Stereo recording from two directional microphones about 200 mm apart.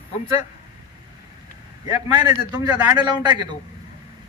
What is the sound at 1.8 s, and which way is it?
A man's voice, 20° right (ahead or behind).